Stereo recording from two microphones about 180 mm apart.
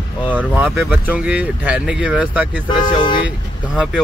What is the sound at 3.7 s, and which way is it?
Speech, 5° right (ahead or behind).